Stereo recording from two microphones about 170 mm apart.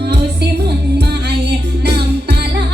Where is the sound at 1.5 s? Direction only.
75° right (ahead or behind).